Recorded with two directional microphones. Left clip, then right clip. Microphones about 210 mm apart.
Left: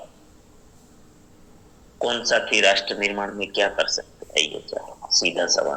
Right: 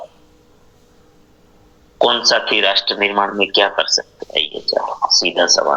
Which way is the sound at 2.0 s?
10° right (ahead or behind).